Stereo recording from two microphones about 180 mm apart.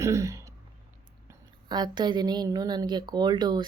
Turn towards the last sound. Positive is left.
turn(degrees=-25)  # may be behind; listen again after turning